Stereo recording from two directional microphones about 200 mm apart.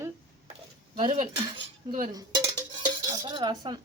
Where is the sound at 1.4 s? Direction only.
25° right (ahead or behind).